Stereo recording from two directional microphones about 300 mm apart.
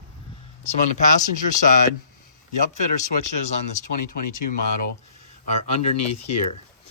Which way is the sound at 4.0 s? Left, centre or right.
Left.